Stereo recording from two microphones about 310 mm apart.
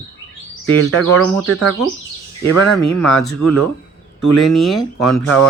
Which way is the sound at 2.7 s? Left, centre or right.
Centre.